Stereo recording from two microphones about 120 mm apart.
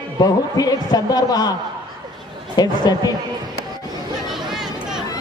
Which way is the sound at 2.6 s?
35° left (ahead or behind).